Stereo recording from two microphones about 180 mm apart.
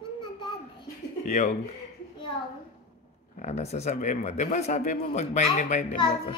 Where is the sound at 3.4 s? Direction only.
40° left (ahead or behind).